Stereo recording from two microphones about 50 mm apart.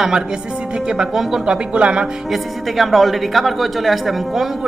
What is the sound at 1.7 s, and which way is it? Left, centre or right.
Speech, right.